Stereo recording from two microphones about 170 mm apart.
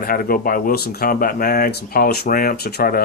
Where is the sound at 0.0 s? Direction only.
60° left (ahead or behind).